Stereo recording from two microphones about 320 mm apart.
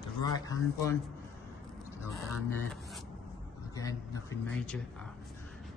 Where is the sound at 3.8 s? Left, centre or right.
Centre.